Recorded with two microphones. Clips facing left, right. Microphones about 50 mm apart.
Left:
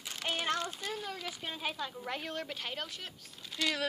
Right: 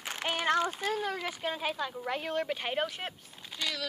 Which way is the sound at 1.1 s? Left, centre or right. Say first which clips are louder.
Right 6 dB; right.